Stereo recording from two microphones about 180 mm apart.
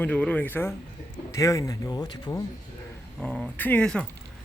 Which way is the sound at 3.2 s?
5° left (ahead or behind).